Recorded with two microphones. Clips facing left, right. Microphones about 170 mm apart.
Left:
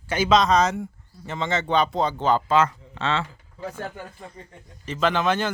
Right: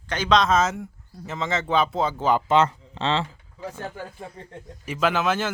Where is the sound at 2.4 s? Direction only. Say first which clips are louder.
Right 1 dB; 25° right (ahead or behind).